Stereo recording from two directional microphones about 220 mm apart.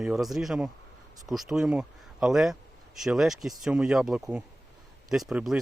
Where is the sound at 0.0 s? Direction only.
Centre (ahead or behind).